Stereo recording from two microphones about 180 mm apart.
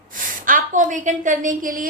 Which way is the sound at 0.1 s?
45° right (ahead or behind).